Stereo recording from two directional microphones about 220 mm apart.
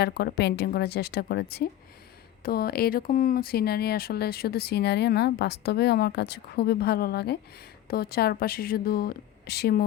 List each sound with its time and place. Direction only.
0.0 s speech: 45° left (ahead or behind)